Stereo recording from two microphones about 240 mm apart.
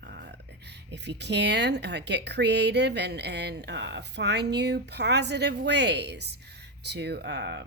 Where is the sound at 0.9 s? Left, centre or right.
Right.